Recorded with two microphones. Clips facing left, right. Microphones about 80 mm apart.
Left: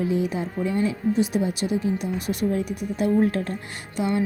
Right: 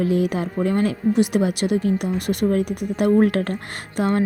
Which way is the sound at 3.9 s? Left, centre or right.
Right.